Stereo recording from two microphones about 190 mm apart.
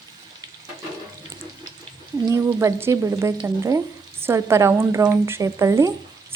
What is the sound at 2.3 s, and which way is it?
Speech, 15° right (ahead or behind).